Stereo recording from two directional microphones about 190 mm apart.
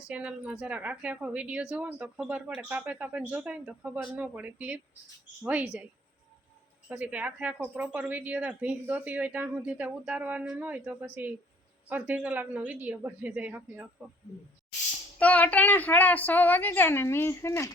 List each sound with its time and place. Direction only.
0.1 s speech: 5° right (ahead or behind)
15.2 s a woman's voice: 5° left (ahead or behind)